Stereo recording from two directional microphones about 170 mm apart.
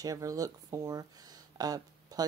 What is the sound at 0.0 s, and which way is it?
Speech, 20° right (ahead or behind).